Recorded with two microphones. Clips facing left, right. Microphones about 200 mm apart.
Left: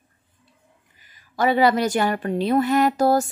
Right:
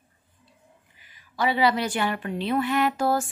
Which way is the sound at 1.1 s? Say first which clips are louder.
Left 5 dB; 45° left (ahead or behind).